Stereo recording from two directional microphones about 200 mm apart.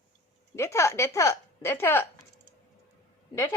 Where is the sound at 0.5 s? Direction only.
15° left (ahead or behind).